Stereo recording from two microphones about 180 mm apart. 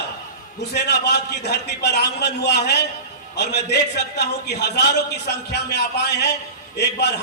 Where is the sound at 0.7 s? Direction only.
70° left (ahead or behind).